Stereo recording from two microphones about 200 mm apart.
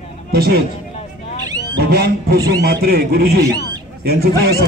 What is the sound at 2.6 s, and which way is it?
Speech, 50° right (ahead or behind).